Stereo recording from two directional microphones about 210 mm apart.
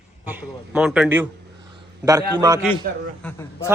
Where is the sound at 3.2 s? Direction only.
5° left (ahead or behind).